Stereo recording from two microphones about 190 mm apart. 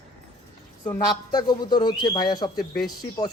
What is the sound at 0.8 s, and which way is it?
Speech, 20° left (ahead or behind).